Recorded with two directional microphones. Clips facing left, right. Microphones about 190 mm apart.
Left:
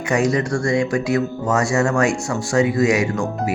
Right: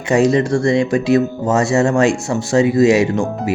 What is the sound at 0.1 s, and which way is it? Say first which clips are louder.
Speech: right 6 dB; 25° right (ahead or behind).